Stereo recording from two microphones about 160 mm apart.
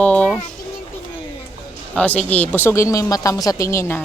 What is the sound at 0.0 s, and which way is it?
Music, 10° left (ahead or behind).